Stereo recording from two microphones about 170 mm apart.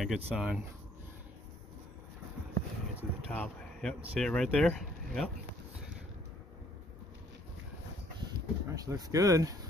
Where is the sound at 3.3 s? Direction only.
5° left (ahead or behind).